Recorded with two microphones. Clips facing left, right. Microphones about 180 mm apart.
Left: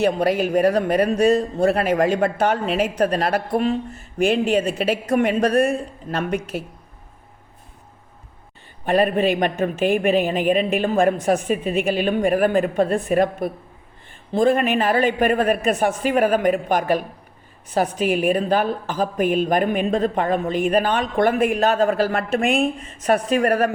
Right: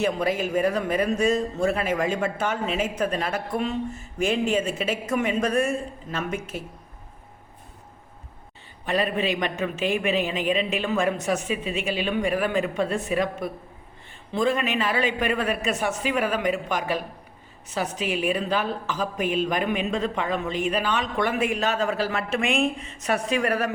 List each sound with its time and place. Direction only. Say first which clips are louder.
0.3 s speech: left 5 dB; 65° left (ahead or behind)
3.6 s speech: left 5 dB; 60° left (ahead or behind)
8.8 s a woman's voice: left 7 dB; 55° left (ahead or behind)
22.4 s a woman's voice: left 4 dB; 35° left (ahead or behind)